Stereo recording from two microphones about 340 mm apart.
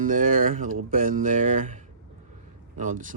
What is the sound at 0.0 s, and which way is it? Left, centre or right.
Speech, right.